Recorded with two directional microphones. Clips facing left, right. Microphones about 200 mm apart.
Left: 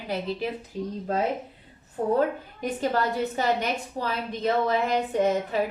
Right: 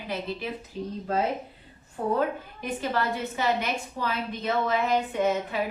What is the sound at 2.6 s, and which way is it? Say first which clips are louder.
A woman's voice: left 3 dB; 40° left (ahead or behind).